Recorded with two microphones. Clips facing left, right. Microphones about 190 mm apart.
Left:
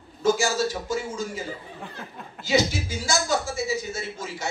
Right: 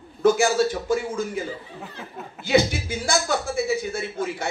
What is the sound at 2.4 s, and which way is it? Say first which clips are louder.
A man's voice: right 3 dB; 55° right (ahead or behind).